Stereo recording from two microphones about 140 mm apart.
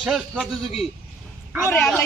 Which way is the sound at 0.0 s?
5° right (ahead or behind).